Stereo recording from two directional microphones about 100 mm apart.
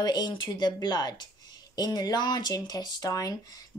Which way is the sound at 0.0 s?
45° left (ahead or behind).